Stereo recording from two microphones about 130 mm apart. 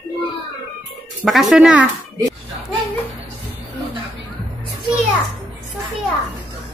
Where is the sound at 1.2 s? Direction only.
Centre (ahead or behind).